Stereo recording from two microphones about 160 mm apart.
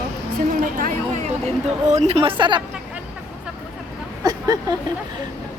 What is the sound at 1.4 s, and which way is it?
Speech, 45° right (ahead or behind).